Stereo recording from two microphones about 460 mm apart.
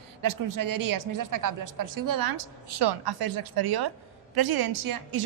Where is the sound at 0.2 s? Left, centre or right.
Right.